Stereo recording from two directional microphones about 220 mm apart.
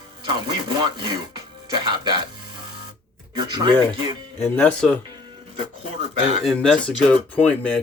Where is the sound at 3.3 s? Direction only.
20° right (ahead or behind).